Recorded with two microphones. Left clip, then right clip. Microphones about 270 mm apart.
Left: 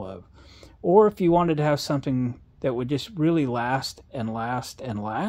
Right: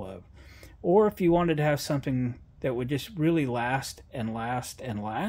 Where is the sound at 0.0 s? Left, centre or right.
Left.